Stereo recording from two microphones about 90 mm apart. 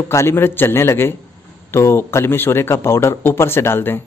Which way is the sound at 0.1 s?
30° left (ahead or behind).